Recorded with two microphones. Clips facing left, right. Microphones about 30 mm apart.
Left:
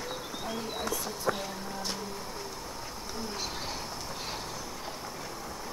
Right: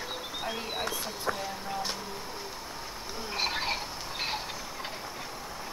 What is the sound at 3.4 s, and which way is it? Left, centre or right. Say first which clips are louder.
Bird: right 6 dB; right.